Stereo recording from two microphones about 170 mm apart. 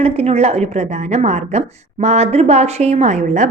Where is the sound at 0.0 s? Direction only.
40° right (ahead or behind).